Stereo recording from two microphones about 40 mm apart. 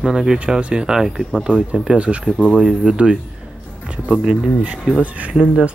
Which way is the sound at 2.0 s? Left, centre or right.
Right.